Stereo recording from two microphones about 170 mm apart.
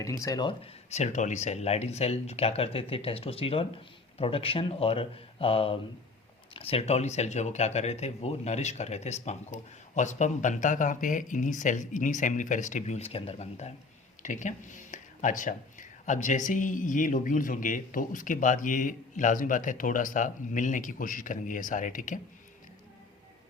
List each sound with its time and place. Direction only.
0.0 s speech: 20° left (ahead or behind); by 22.2 s 50° left (ahead or behind)